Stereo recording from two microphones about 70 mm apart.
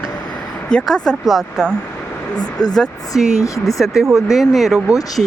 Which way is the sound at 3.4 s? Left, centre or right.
Left.